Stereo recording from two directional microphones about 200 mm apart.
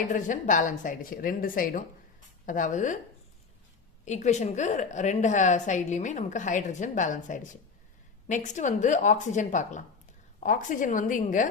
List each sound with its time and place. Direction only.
0.1 s a woman's voice: 40° left (ahead or behind)
4.0 s a woman's voice: 35° left (ahead or behind)